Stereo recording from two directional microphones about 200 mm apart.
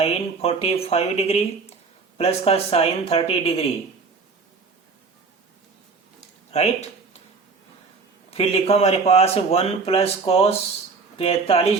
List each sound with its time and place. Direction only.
0.0 s speech: 30° left (ahead or behind)
6.5 s a sound: 30° left (ahead or behind)
8.3 s speech: 30° left (ahead or behind)